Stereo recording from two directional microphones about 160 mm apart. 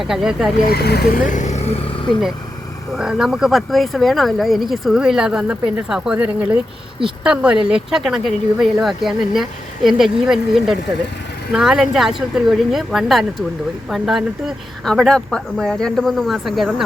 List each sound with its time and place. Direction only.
0.0 s speech: centre (ahead or behind)
0.7 s speech: 80° left
1.3 s speech: 45° left (ahead or behind)
2.9 s speech: 5° right (ahead or behind)